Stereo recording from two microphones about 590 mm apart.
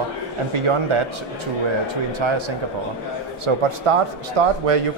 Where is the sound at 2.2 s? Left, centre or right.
Right.